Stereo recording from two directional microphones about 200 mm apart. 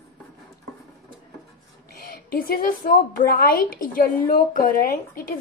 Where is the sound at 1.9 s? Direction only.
50° left (ahead or behind).